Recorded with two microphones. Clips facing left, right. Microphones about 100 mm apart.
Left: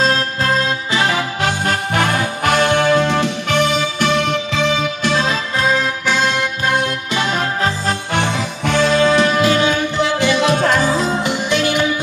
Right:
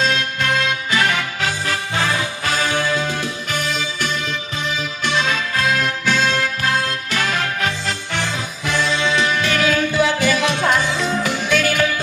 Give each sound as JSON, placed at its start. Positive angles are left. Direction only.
{"t": 0.0, "sound": "music", "side_deg": 35}
{"t": 1.4, "sound": "music", "side_deg": 55}
{"t": 5.0, "sound": "music", "side_deg": 40}
{"t": 6.0, "sound": "music", "side_deg": 15}
{"t": 7.8, "sound": "music", "side_deg": 55}
{"t": 9.5, "sound": "music", "side_deg": 25}
{"t": 10.5, "sound": "music", "side_deg": 45}
{"t": 11.2, "sound": "music", "side_deg": 20}